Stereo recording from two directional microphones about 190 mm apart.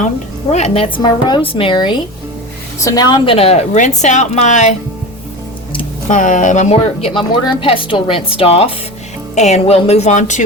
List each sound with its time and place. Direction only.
0.5 s a woman's voice: 35° left (ahead or behind)
6.1 s a woman's voice: 40° left (ahead or behind)